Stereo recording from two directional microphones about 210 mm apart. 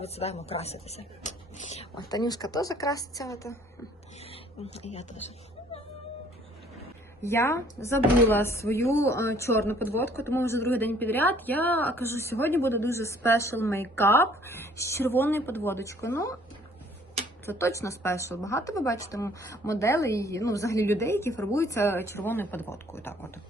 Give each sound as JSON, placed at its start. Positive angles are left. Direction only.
{"t": 0.0, "sound": "speech", "side_deg": 30}
{"t": 2.0, "sound": "speech", "side_deg": 20}
{"t": 4.2, "sound": "speech", "side_deg": 30}
{"t": 7.2, "sound": "speech", "side_deg": 10}
{"t": 17.4, "sound": "speech", "side_deg": 15}